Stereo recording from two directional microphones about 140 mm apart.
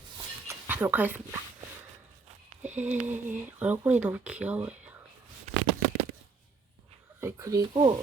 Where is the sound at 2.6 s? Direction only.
10° right (ahead or behind).